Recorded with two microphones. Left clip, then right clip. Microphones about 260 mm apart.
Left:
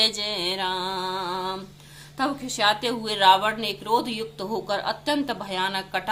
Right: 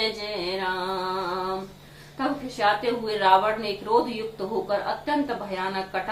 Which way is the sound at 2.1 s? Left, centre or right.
Left.